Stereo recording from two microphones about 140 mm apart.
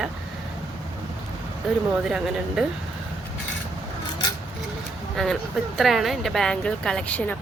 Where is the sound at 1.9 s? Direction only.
5° right (ahead or behind).